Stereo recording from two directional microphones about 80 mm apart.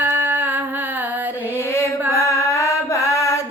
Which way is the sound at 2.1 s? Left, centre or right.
Left.